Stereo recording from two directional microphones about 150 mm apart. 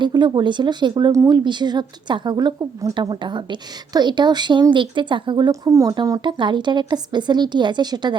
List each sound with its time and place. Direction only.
0.0 s speech: 30° right (ahead or behind)